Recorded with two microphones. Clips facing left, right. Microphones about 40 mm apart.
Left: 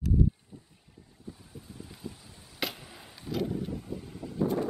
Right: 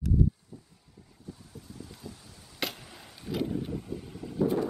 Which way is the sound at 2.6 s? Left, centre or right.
Centre.